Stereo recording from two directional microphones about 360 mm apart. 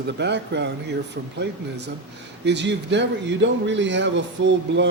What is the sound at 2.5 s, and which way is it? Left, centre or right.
Speech, right.